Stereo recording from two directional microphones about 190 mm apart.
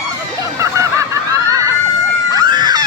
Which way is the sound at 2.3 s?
20° right (ahead or behind).